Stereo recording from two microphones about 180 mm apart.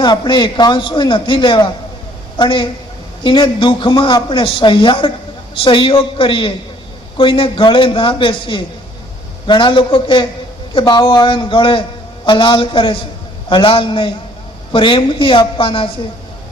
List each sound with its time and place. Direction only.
0.0 s a man's voice: 25° left (ahead or behind)